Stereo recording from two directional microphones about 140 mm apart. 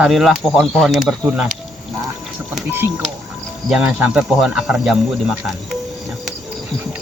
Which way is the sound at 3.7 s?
5° right (ahead or behind).